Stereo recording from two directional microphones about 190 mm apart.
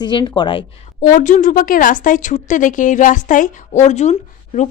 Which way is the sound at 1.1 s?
40° left (ahead or behind).